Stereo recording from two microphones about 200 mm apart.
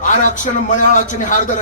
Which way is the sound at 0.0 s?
40° left (ahead or behind).